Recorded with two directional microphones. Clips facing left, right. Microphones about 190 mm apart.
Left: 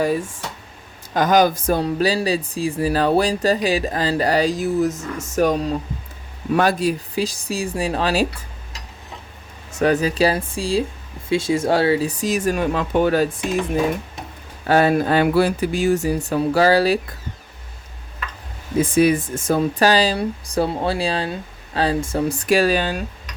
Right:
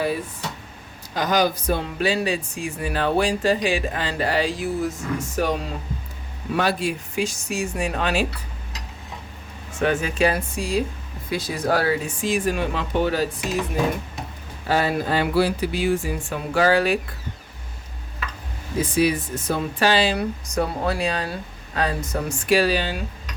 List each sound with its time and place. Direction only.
1.1 s speech: 50° left (ahead or behind)
9.7 s speech: 40° left (ahead or behind)
14.7 s speech: 55° left (ahead or behind); by 17.0 s 35° left (ahead or behind)
18.9 s speech: 50° left (ahead or behind)